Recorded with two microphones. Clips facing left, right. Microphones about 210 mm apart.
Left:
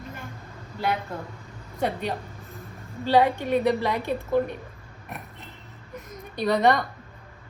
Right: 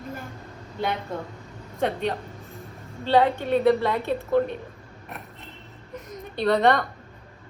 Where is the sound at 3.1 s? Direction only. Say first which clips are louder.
Even; 10° left (ahead or behind).